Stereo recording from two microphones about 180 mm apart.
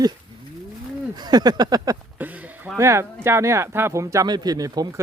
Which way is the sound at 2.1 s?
10° right (ahead or behind).